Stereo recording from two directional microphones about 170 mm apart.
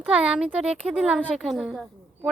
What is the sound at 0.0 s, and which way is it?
Speech, 5° right (ahead or behind).